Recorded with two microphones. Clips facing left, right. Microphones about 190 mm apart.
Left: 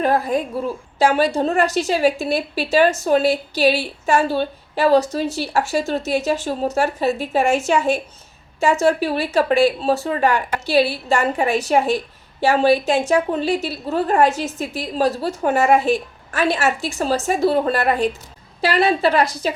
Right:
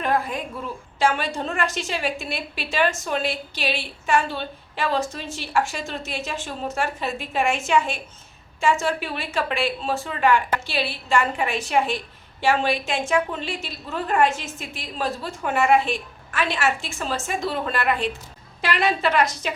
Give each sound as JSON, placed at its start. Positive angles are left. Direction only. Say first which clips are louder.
{"t": 0.0, "sound": "a woman's voice", "louder": "left 6 dB", "side_deg": 40}